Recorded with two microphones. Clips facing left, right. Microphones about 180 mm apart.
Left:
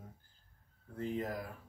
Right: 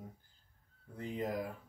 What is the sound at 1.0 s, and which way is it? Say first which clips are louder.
Speech: even; 20° right (ahead or behind).